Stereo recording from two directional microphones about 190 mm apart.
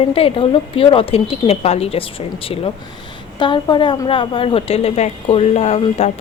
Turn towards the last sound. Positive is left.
turn(degrees=35)  # may be behind; listen again after turning